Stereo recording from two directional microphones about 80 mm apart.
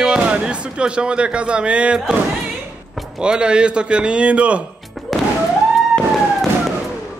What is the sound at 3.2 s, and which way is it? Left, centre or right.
A man's voice, centre.